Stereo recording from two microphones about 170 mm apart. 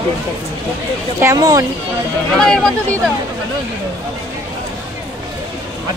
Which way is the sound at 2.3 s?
5° left (ahead or behind).